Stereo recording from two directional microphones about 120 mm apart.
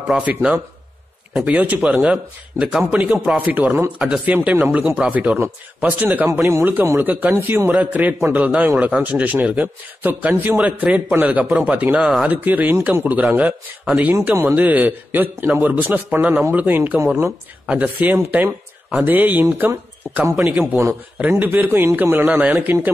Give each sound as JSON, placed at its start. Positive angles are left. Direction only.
{"t": 0.1, "sound": "a man's voice", "side_deg": -10}
{"t": 20.4, "sound": "a man's voice", "side_deg": -10}